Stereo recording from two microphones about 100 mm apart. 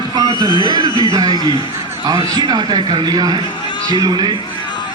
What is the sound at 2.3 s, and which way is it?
Speech, 45° right (ahead or behind).